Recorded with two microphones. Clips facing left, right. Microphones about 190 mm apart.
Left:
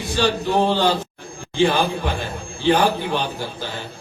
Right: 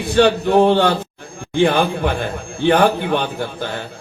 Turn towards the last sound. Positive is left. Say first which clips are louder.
# right 4 dB
turn(degrees=-55)  # may be behind; listen again after turning